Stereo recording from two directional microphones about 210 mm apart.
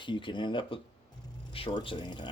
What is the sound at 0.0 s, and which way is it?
Speech, 25° left (ahead or behind).